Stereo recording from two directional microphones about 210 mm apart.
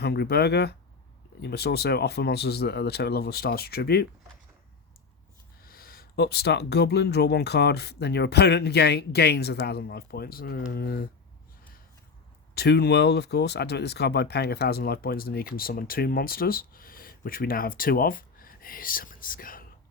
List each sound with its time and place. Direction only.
0.0 s speech: 50° left (ahead or behind)
5.6 s speech: 45° left (ahead or behind)
12.5 s speech: 50° left (ahead or behind)